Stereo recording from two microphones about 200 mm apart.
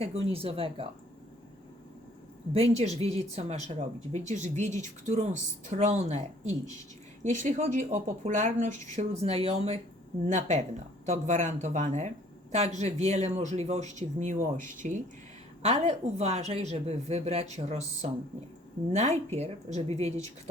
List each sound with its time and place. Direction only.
0.0 s speech: 30° right (ahead or behind)
2.5 s speech: 30° right (ahead or behind)